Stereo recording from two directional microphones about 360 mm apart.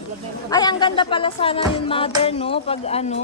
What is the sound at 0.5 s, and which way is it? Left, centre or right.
Music, centre.